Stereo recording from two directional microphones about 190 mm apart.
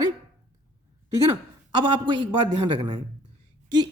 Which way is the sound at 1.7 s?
25° right (ahead or behind).